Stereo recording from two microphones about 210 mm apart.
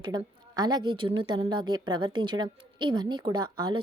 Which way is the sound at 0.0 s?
20° right (ahead or behind).